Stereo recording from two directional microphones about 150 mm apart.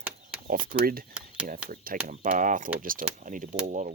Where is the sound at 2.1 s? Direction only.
60° right (ahead or behind).